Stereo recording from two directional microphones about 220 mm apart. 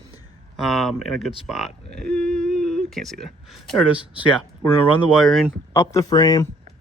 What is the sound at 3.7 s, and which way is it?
Speech, 5° right (ahead or behind).